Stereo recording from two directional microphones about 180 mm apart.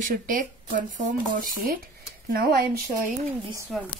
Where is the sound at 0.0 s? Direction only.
50° right (ahead or behind).